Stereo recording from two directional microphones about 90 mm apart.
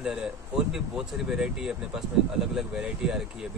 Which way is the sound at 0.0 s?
5° right (ahead or behind).